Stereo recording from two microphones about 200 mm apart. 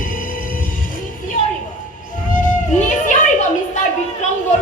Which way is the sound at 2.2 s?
40° left (ahead or behind).